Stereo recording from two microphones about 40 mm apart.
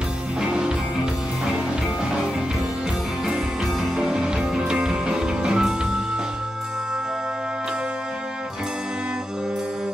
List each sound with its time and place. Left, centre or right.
3.9 s music: centre